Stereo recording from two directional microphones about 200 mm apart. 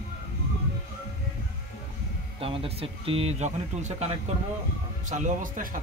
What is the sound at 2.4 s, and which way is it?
Speech, 30° right (ahead or behind).